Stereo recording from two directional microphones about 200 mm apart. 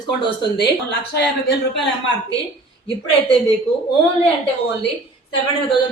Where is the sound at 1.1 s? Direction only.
55° left (ahead or behind).